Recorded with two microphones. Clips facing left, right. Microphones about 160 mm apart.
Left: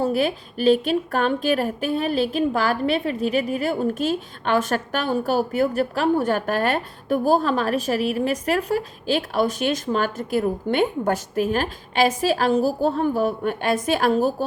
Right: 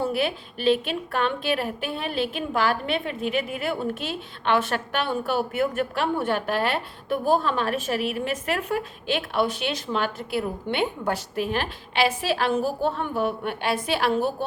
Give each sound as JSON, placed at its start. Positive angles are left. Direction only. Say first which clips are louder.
{"t": 0.0, "sound": "a woman's voice", "louder": "left 4 dB", "side_deg": 40}